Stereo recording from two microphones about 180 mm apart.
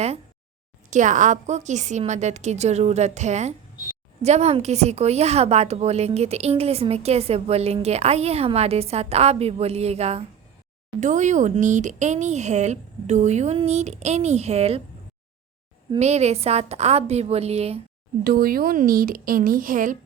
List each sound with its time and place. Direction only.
0.9 s a woman's voice: 45° right (ahead or behind)
16.0 s a woman's voice: 35° right (ahead or behind)
18.2 s speech: 55° right (ahead or behind)